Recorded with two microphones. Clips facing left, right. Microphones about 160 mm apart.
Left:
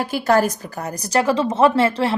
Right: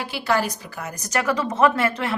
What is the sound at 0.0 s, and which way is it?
A woman's voice, 45° left (ahead or behind).